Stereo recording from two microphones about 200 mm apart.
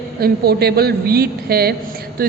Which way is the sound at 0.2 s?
50° right (ahead or behind).